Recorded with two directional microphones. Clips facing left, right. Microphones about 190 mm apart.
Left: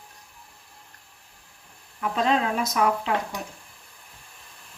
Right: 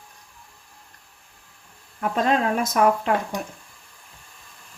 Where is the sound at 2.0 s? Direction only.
45° right (ahead or behind).